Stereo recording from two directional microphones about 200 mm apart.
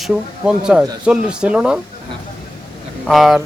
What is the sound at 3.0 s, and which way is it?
Speech, centre (ahead or behind).